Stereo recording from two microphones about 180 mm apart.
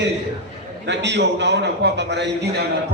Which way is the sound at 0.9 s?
75° right (ahead or behind).